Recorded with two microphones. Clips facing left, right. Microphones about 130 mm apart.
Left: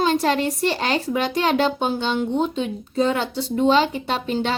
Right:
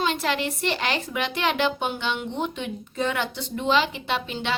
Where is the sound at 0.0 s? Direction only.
35° left (ahead or behind).